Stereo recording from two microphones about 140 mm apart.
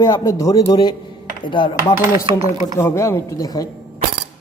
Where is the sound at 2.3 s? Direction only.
35° right (ahead or behind).